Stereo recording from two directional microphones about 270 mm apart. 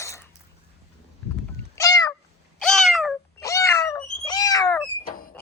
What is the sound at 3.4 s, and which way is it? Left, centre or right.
Cat, centre.